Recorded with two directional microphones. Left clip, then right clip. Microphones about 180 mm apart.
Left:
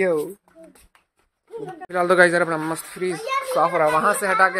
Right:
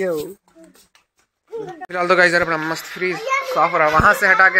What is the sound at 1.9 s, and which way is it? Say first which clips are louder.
A child's voice: right 1 dB; 10° left (ahead or behind).